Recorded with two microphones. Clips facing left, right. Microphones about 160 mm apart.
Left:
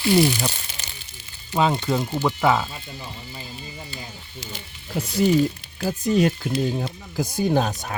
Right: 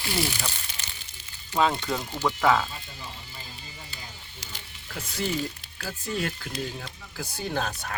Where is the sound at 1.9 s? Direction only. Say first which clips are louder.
Left 5 dB; 15° left (ahead or behind).